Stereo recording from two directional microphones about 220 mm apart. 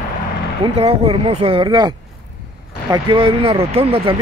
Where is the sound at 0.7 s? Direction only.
25° right (ahead or behind).